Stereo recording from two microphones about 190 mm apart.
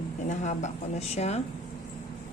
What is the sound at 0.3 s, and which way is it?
A woman's voice, 40° left (ahead or behind).